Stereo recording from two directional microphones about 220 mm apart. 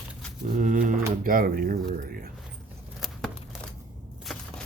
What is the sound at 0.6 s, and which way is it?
Speech, 35° right (ahead or behind).